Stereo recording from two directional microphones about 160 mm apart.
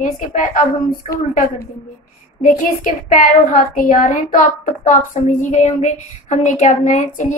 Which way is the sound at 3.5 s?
60° left (ahead or behind).